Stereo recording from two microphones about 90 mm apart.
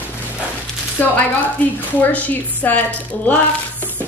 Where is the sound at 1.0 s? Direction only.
20° left (ahead or behind).